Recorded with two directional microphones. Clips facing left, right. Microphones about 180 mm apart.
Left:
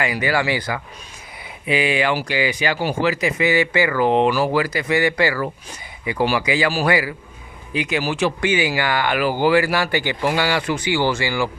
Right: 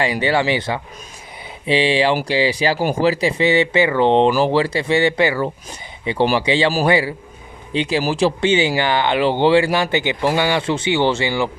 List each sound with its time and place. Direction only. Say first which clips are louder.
0.0 s speech: right 3 dB; 30° right (ahead or behind)